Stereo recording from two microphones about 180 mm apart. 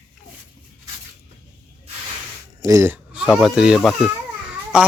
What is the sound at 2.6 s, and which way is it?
Speech, 15° right (ahead or behind).